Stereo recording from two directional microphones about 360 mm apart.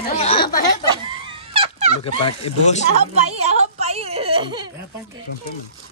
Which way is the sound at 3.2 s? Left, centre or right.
Centre.